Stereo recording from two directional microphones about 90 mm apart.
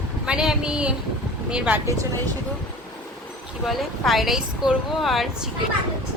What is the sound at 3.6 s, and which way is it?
Speech, centre (ahead or behind).